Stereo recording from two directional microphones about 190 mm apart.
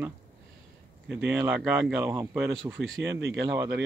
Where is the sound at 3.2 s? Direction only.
60° right (ahead or behind).